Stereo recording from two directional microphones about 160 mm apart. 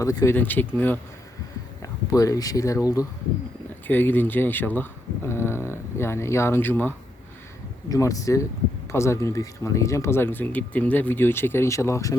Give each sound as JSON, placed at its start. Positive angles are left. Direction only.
{"t": 0.0, "sound": "speech", "side_deg": 20}